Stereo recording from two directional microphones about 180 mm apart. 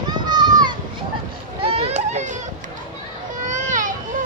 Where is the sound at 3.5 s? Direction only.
45° right (ahead or behind).